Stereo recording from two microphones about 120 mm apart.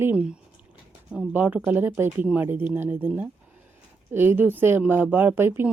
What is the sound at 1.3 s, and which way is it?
Speech, 15° right (ahead or behind).